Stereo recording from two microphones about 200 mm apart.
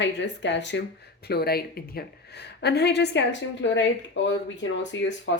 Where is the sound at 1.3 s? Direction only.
50° left (ahead or behind).